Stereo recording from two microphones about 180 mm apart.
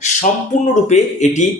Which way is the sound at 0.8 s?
40° left (ahead or behind).